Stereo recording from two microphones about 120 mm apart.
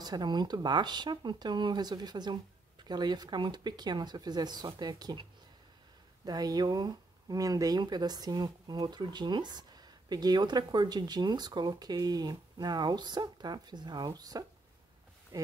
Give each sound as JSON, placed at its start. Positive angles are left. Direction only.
{"t": 0.0, "sound": "speech", "side_deg": -35}
{"t": 6.2, "sound": "speech", "side_deg": -35}